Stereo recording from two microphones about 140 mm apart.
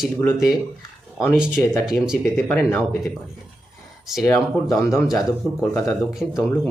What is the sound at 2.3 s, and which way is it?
Speech, 15° left (ahead or behind).